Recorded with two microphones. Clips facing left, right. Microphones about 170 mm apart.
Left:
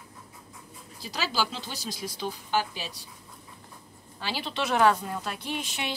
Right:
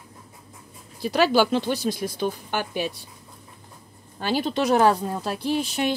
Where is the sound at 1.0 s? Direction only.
60° right (ahead or behind).